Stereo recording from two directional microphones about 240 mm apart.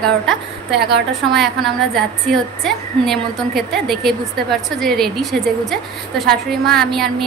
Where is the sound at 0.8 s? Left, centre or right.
Right.